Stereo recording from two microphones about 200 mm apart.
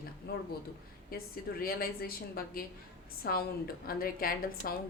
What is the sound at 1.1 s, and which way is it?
A woman's voice, 50° left (ahead or behind).